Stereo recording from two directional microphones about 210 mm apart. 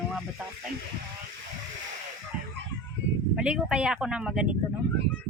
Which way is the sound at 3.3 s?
5° right (ahead or behind).